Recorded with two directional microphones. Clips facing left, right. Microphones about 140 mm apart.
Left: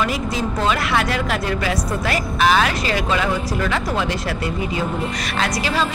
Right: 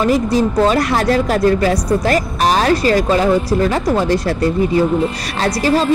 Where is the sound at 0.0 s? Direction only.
40° right (ahead or behind).